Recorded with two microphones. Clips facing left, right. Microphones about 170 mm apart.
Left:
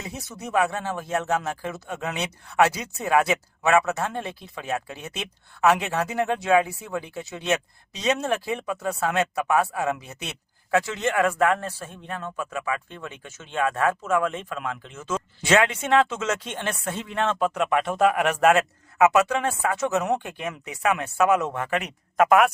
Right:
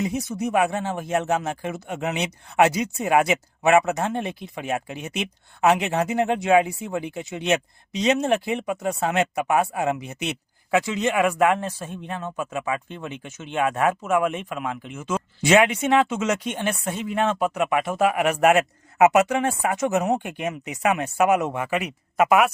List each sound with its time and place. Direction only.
0.0 s speech: 15° right (ahead or behind)